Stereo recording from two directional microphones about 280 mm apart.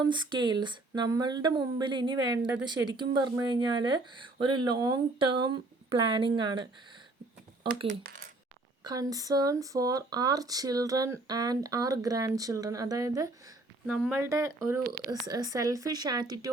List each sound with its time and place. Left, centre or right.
0.0 s speech: centre
7.9 s speech: right
8.8 s speech: centre